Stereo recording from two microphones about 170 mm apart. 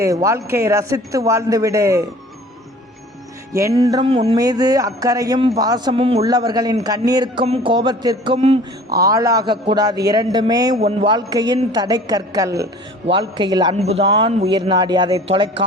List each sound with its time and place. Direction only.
0.0 s a man's voice: 20° right (ahead or behind)
3.5 s a man's voice: 15° right (ahead or behind)
4.0 s a sound: 35° right (ahead or behind)
4.4 s a woman's voice: 20° right (ahead or behind)
6.2 s a woman's voice: 25° right (ahead or behind)
9.0 s a woman's voice: 20° right (ahead or behind)
13.7 s a woman's voice: 35° right (ahead or behind)